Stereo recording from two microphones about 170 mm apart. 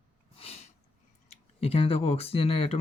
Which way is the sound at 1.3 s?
35° left (ahead or behind).